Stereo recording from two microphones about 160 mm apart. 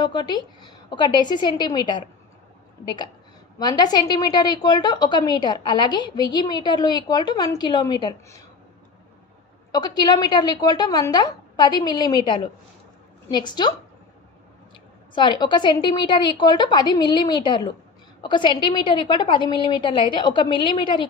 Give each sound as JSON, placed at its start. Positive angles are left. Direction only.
{"t": 0.0, "sound": "a woman's voice", "side_deg": 25}
{"t": 9.7, "sound": "a woman's voice", "side_deg": 25}
{"t": 15.1, "sound": "a woman's voice", "side_deg": 30}